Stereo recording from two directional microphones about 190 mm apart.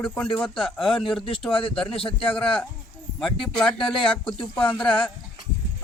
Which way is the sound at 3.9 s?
25° left (ahead or behind).